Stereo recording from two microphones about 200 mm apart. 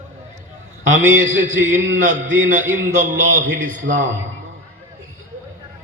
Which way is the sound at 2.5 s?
40° right (ahead or behind).